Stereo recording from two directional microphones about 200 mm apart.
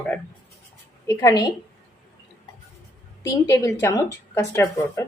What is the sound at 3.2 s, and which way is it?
Speech, 15° left (ahead or behind).